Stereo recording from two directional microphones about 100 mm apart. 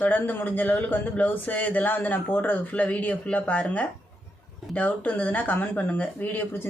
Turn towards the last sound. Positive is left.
turn(degrees=20)  # may be behind; listen again after turning